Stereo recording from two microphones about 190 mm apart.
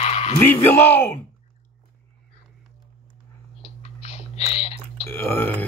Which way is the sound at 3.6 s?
35° left (ahead or behind).